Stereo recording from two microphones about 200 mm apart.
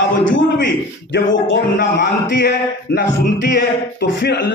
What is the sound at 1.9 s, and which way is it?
A man's voice, 55° left (ahead or behind).